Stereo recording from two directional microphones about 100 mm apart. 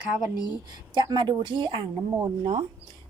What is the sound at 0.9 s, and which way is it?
A woman's voice, 50° right (ahead or behind).